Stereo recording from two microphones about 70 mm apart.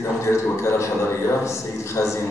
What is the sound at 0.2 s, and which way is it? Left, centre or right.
A man's voice, left.